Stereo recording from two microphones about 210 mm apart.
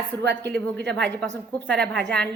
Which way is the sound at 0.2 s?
55° right (ahead or behind).